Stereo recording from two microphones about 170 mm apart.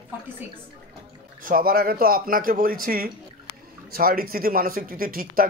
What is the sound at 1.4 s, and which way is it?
Speech, 55° right (ahead or behind).